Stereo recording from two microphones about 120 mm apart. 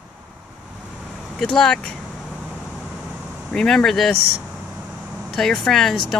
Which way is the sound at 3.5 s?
5° left (ahead or behind).